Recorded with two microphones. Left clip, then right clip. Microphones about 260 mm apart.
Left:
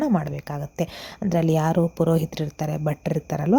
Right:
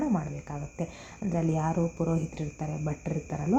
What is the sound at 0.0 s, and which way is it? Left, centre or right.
Speech, left.